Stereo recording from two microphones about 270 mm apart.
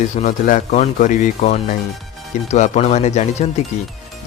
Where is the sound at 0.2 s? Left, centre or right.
Left.